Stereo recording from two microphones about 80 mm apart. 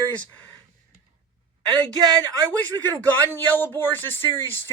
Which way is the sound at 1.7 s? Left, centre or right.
Right.